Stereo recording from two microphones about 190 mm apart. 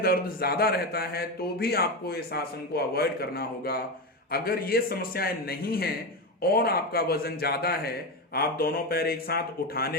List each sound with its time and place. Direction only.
0.0 s a man's voice: 50° left (ahead or behind)